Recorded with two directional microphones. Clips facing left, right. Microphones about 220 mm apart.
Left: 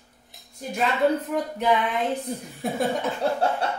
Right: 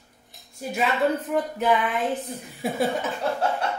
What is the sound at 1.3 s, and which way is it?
A woman's voice, centre (ahead or behind).